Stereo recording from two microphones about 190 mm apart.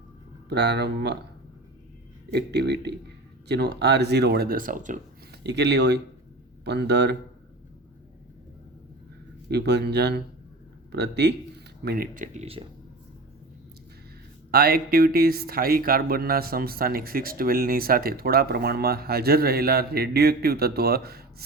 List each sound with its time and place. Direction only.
0.4 s speech: 60° right (ahead or behind)
2.3 s speech: 60° right (ahead or behind); by 4.9 s 45° right (ahead or behind)
5.3 s speech: 60° right (ahead or behind)
9.5 s speech: 60° right (ahead or behind); by 12.6 s 35° right (ahead or behind)
14.5 s speech: 55° right (ahead or behind)